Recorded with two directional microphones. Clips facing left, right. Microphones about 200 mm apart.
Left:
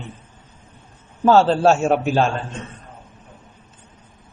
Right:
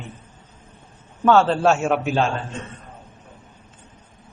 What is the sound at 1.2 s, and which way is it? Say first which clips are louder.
A man's voice: left 2 dB; 30° left (ahead or behind).